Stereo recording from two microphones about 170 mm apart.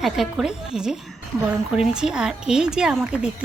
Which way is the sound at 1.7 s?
5° right (ahead or behind).